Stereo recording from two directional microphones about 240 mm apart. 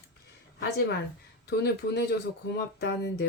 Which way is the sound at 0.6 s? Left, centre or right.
Left.